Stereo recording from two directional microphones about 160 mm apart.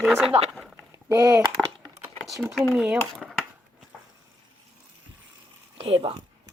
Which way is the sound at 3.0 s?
5° left (ahead or behind).